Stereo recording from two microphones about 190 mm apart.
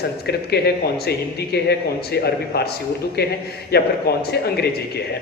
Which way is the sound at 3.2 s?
55° left (ahead or behind).